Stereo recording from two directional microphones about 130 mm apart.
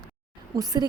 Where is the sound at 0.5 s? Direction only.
30° right (ahead or behind).